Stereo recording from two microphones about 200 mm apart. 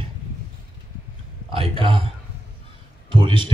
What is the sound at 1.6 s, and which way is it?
Speech, 25° right (ahead or behind).